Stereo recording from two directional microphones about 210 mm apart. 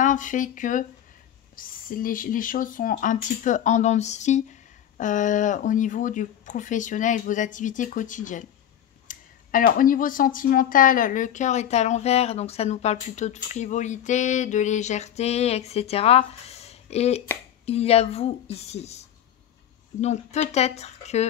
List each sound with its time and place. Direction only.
0.0 s a woman's voice: 40° left (ahead or behind)